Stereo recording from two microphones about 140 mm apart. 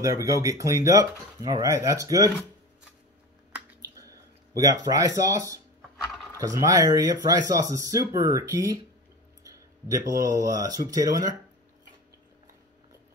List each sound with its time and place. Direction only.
0.0 s speech: 25° right (ahead or behind)
3.8 s a sound: 25° right (ahead or behind)
6.3 s speech: 20° right (ahead or behind)